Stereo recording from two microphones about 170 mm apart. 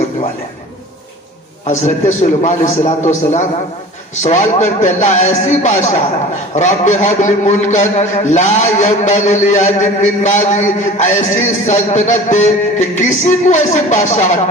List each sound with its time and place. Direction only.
1.6 s a man's voice: 45° left (ahead or behind)